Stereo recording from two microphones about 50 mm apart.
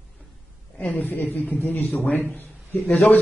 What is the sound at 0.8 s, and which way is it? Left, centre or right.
A man's voice, left.